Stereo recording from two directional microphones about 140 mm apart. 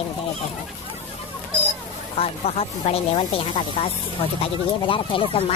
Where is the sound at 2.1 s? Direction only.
45° left (ahead or behind).